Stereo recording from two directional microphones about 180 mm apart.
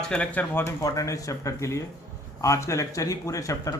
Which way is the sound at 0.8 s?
20° left (ahead or behind).